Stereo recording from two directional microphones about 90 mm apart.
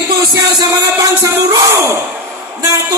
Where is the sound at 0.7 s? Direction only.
30° right (ahead or behind).